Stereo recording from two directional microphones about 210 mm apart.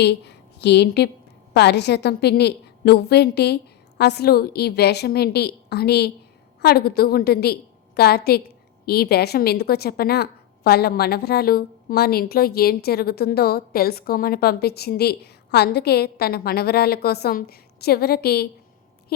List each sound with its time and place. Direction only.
0.0 s a woman's voice: 55° left (ahead or behind)